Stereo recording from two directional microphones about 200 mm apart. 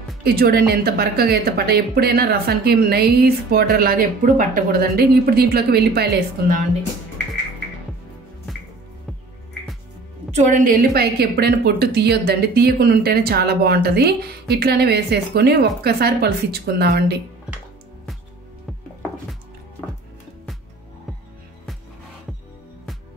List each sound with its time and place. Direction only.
0.2 s a woman's voice: 50° right (ahead or behind)
10.3 s a woman's voice: 40° right (ahead or behind)